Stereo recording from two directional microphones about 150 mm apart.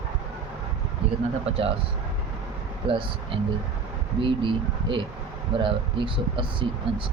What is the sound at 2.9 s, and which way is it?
Speech, 35° right (ahead or behind).